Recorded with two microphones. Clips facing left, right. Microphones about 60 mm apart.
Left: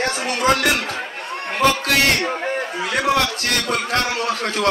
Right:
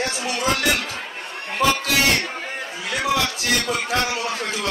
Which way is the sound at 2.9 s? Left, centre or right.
Left.